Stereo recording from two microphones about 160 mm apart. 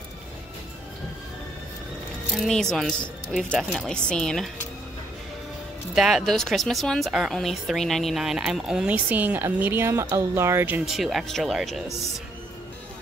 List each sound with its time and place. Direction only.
2.3 s speech: centre (ahead or behind)
5.9 s speech: centre (ahead or behind)
10.9 s speech: centre (ahead or behind)